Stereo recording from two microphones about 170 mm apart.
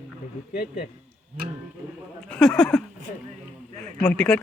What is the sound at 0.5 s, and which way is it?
Speech, 60° left (ahead or behind).